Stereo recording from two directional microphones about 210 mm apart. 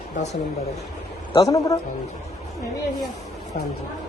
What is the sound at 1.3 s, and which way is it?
Speech, 15° left (ahead or behind).